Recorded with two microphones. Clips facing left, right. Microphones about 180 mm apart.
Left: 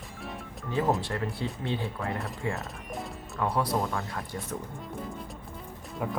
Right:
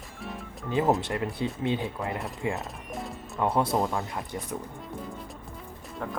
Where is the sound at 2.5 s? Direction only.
Centre (ahead or behind).